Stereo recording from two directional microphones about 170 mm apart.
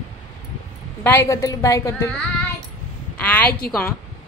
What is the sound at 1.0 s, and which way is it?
A woman's voice, 15° left (ahead or behind).